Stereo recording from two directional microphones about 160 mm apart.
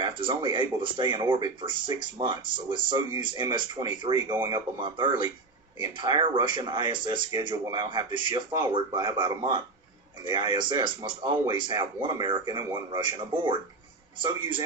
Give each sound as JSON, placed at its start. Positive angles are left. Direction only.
{"t": 0.0, "sound": "speech", "side_deg": -30}